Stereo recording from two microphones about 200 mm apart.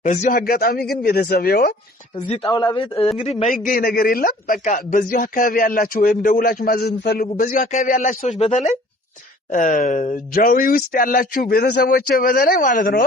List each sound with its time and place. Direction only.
0.0 s speech: 35° left (ahead or behind)
2.5 s a man's voice: 20° left (ahead or behind); by 13.1 s 45° left (ahead or behind)